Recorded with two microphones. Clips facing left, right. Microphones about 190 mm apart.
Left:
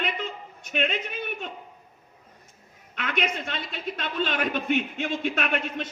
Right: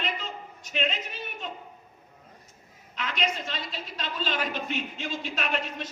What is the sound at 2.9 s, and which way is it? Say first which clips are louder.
A man's voice: left 2 dB; 55° left (ahead or behind).